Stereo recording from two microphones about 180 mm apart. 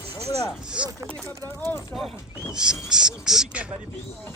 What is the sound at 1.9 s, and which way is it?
Speech, centre (ahead or behind).